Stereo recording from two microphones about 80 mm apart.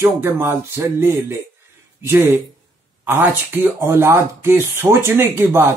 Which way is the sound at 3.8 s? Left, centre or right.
Right.